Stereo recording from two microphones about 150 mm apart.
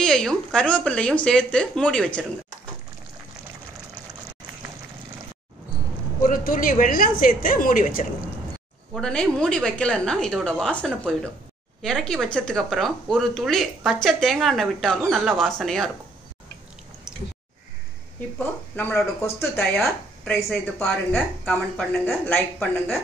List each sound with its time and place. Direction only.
0.0 s a woman's voice: 5° left (ahead or behind)
6.2 s a woman's voice: 65° left (ahead or behind)
8.9 s a woman's voice: 5° left (ahead or behind)
18.4 s a woman's voice: 10° left (ahead or behind)